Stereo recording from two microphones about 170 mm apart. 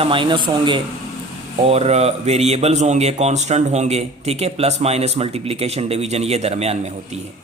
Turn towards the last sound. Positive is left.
turn(degrees=-40)  # may be behind; listen again after turning